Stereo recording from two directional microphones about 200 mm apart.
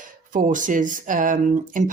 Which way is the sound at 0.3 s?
40° right (ahead or behind).